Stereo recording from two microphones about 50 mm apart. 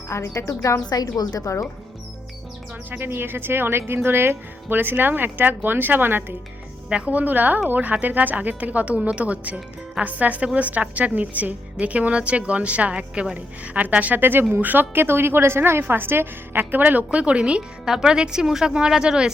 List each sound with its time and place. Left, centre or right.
0.1 s speech: left
2.9 s speech: right
6.9 s a woman's voice: right
17.8 s a woman's voice: centre